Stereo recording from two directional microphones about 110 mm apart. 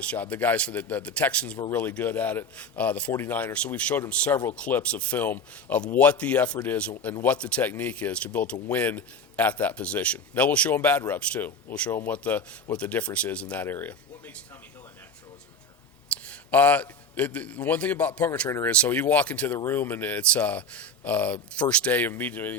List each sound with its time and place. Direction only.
0.0 s a man's voice: 10° left (ahead or behind)
16.2 s a man's voice: 15° left (ahead or behind)
18.4 s speech: 25° left (ahead or behind)
18.7 s a man's voice: 15° left (ahead or behind)